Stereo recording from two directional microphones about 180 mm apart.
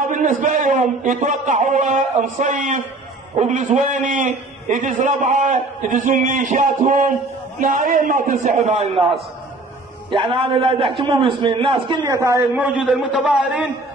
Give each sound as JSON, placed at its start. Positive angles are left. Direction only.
{"t": 0.0, "sound": "a man's voice", "side_deg": -45}
{"t": 10.0, "sound": "a man's voice", "side_deg": -30}